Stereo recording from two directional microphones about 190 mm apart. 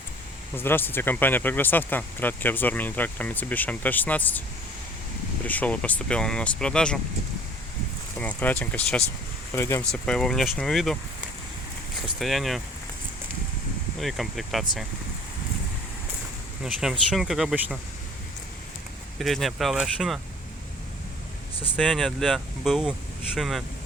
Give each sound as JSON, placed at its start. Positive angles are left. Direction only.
{"t": 0.5, "sound": "speech", "side_deg": 10}
{"t": 5.5, "sound": "speech", "side_deg": 5}
{"t": 8.1, "sound": "speech", "side_deg": 10}
{"t": 9.9, "sound": "speech", "side_deg": 5}
{"t": 12.2, "sound": "speech", "side_deg": 0}
{"t": 14.0, "sound": "speech", "side_deg": 0}
{"t": 16.6, "sound": "speech", "side_deg": -5}
{"t": 19.2, "sound": "speech", "side_deg": 0}
{"t": 21.7, "sound": "speech", "side_deg": 0}